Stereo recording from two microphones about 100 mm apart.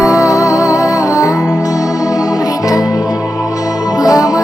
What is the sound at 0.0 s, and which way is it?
Music, 35° left (ahead or behind).